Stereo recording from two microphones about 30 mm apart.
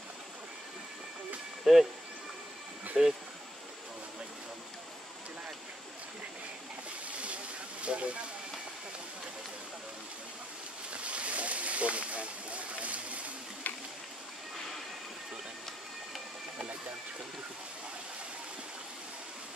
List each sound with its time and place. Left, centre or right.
1.6 s speech: centre
2.9 s speech: centre
7.8 s vehicle: right
10.9 s boat: right
13.7 s a sound: left